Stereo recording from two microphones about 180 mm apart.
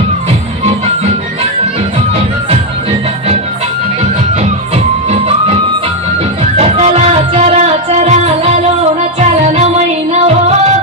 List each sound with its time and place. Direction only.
5.0 s music: 35° right (ahead or behind)
6.6 s music: 35° right (ahead or behind)